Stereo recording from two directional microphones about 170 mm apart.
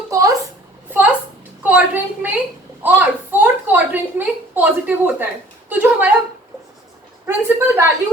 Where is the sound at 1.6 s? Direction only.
10° right (ahead or behind).